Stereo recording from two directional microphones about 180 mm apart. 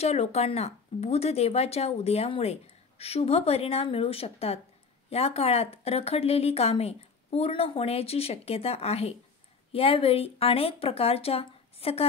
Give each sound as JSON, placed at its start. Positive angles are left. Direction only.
{"t": 0.0, "sound": "speech", "side_deg": 35}